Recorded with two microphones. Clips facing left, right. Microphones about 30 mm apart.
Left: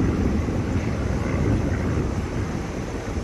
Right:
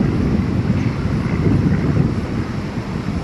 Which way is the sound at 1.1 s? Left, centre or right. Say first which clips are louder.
Right 6 dB; right.